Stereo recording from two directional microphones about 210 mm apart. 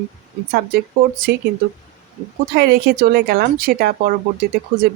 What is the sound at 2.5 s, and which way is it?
Speech, 50° right (ahead or behind).